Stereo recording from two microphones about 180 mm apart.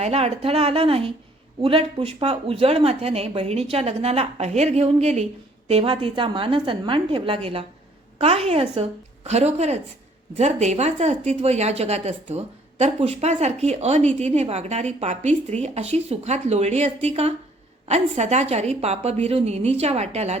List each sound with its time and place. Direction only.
0.0 s a woman's voice: 35° right (ahead or behind)